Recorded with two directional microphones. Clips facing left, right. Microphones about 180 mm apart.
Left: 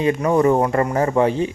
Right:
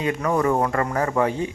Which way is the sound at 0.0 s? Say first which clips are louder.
Left 5 dB; 25° left (ahead or behind).